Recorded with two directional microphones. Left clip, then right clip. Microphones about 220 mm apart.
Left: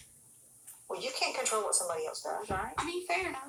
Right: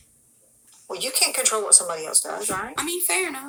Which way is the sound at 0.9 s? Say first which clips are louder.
Right 9 dB; 50° right (ahead or behind).